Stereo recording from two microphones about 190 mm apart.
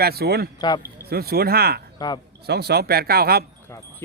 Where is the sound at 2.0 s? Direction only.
20° left (ahead or behind).